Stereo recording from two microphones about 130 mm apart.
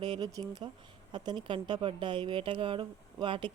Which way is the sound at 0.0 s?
35° right (ahead or behind).